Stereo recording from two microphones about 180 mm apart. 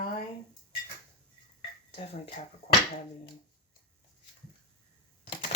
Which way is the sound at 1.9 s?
35° left (ahead or behind).